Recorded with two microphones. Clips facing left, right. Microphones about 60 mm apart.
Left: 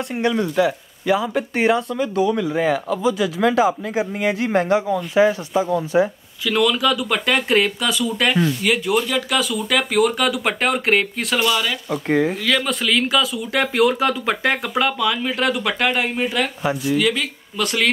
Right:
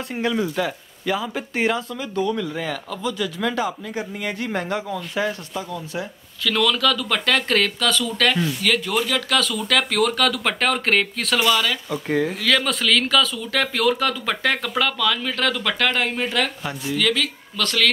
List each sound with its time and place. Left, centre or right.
0.1 s speech: centre
2.6 s speech: centre